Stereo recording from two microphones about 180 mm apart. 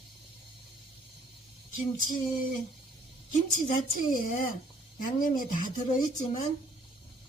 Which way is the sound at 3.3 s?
50° left (ahead or behind).